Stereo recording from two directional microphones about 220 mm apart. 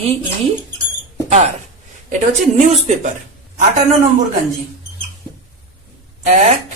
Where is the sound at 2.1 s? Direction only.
35° right (ahead or behind).